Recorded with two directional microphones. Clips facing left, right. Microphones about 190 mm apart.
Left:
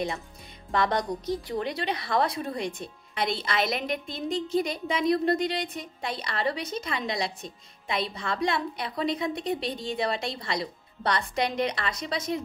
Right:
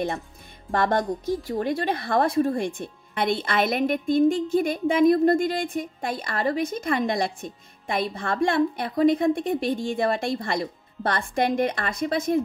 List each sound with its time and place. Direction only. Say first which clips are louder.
0.7 s a woman's voice: right 3 dB; 50° right (ahead or behind)